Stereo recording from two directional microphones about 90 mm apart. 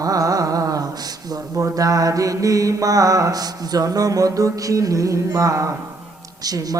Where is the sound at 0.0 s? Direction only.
40° right (ahead or behind).